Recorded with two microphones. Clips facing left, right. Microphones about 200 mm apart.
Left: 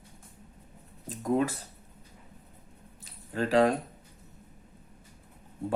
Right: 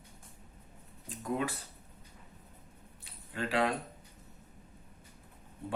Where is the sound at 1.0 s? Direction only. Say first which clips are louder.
Left 7 dB; 40° left (ahead or behind).